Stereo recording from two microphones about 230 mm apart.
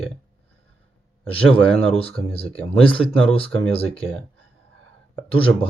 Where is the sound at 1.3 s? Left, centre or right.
Left.